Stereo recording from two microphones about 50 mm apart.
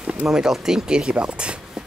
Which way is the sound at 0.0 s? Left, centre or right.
Right.